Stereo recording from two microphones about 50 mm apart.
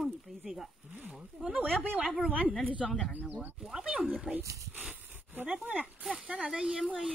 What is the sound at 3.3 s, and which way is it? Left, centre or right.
Speech, right.